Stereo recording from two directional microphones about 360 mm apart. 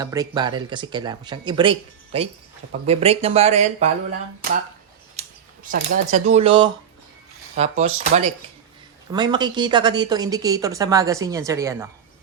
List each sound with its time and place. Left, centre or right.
0.0 s speech: centre
5.6 s speech: right